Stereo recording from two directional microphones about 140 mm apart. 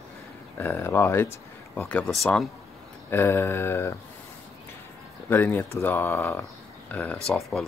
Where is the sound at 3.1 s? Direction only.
15° left (ahead or behind).